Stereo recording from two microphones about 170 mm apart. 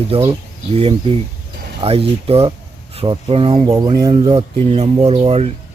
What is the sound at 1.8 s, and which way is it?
Speech, 35° right (ahead or behind).